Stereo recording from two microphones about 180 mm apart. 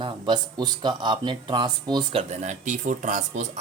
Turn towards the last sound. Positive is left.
turn(degrees=-45)  # may be behind; listen again after turning